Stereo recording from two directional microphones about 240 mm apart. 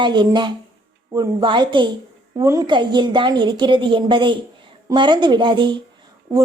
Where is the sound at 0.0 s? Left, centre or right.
Centre.